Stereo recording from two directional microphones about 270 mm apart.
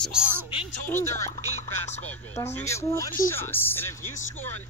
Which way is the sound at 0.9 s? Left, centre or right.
Centre.